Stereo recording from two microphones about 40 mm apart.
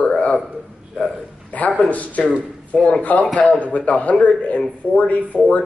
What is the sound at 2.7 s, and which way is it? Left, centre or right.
Speech, left.